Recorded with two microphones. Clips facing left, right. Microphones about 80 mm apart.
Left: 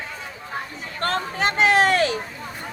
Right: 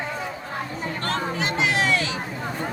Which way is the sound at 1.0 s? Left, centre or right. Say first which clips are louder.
Left 4 dB; left.